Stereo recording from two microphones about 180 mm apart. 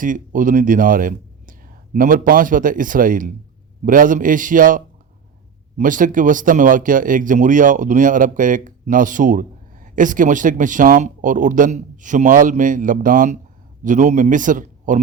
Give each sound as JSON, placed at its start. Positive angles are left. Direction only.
{"t": 0.0, "sound": "speech", "side_deg": -45}